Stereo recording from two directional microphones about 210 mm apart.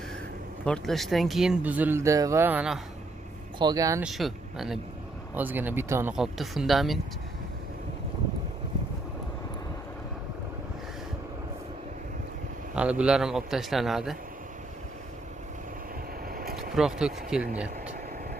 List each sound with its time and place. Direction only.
0.7 s speech: centre (ahead or behind)
3.5 s speech: 20° right (ahead or behind)
4.0 s speech: centre (ahead or behind)
12.7 s speech: 5° right (ahead or behind)
16.3 s vehicle: 45° right (ahead or behind)
16.7 s speech: 5° right (ahead or behind)